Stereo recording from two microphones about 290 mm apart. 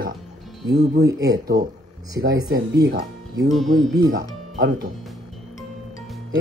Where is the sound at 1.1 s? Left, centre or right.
Centre.